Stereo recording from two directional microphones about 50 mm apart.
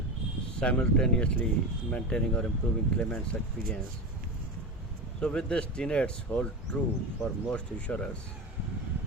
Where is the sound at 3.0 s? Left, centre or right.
Left.